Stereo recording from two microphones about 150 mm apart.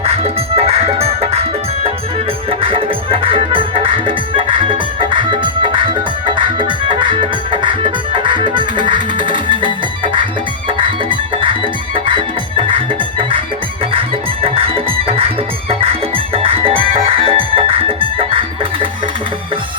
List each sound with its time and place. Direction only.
0.0 s music: 40° right (ahead or behind)
2.5 s music: 35° right (ahead or behind)
14.4 s music: 40° right (ahead or behind)